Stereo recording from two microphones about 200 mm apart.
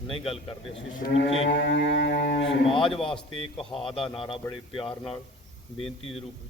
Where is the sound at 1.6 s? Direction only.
60° left (ahead or behind).